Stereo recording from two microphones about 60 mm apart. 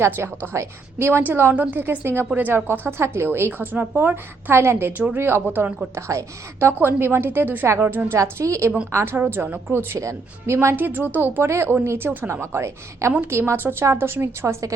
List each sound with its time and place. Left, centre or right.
0.0 s a woman's voice: right
1.2 s a woman's voice: right
5.5 s speech: right
5.9 s a woman's voice: right
6.7 s a woman's voice: right
8.2 s a woman's voice: right
8.9 s a woman's voice: right
10.0 s a woman's voice: right
10.8 s a woman's voice: right